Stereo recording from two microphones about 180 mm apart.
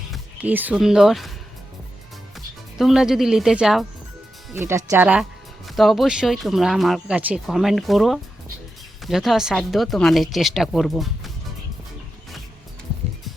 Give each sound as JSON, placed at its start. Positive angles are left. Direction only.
{"t": 0.1, "sound": "speech", "side_deg": -10}
{"t": 2.3, "sound": "speech", "side_deg": 0}
{"t": 4.5, "sound": "speech", "side_deg": -15}